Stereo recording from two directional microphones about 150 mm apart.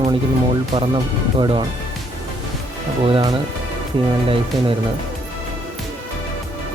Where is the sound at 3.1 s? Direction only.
25° right (ahead or behind).